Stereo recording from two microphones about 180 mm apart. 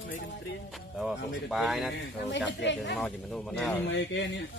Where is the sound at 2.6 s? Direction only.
80° left.